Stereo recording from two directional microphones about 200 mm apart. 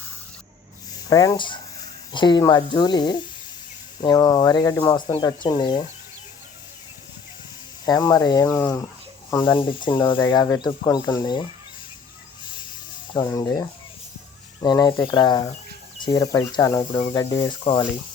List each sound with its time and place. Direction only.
1.1 s speech: 15° left (ahead or behind)
7.9 s speech: 20° left (ahead or behind)
9.4 s speech: 25° left (ahead or behind)
13.1 s speech: 20° left (ahead or behind)
17.6 s speech: 25° left (ahead or behind)